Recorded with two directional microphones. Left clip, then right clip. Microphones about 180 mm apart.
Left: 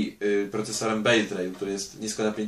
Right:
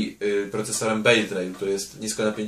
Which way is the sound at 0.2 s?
5° right (ahead or behind).